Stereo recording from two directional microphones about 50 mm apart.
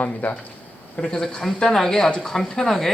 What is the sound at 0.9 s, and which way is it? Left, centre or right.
Speech, centre.